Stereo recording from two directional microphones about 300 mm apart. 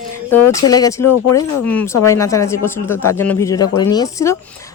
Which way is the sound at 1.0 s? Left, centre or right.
Left.